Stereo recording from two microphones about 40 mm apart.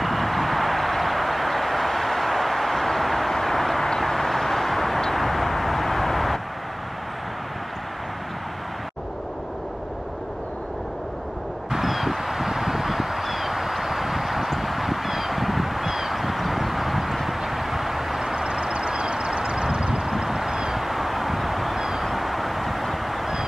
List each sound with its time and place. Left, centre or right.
0.0 s vehicle: centre
11.7 s a sound: centre
18.2 s vehicle: centre